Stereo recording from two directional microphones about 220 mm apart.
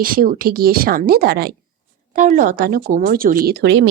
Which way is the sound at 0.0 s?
40° right (ahead or behind).